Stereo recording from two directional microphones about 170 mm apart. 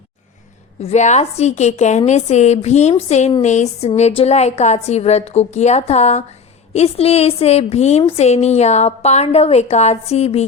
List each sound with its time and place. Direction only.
0.8 s a woman's voice: 40° left (ahead or behind)